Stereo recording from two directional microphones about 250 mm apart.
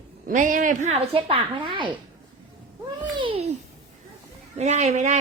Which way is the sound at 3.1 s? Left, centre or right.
Right.